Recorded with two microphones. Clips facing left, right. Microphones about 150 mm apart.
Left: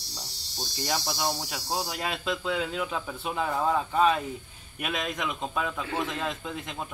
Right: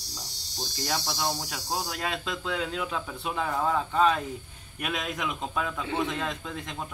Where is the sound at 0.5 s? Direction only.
5° left (ahead or behind).